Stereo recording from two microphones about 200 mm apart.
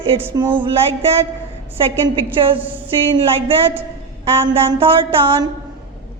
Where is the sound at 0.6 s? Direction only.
30° right (ahead or behind).